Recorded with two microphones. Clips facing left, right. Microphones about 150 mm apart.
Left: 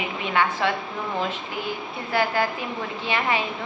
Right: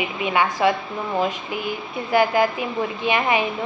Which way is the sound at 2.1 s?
15° right (ahead or behind).